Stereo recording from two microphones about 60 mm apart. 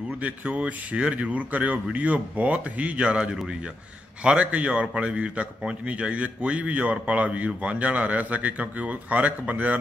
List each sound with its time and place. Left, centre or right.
0.2 s a man's voice: right